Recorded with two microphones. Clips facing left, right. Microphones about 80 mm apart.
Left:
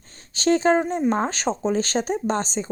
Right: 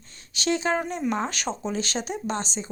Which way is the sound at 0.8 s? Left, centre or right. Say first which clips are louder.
Left 5 dB; left.